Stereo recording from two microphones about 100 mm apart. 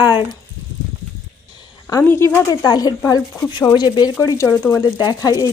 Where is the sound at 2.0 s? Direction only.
25° left (ahead or behind).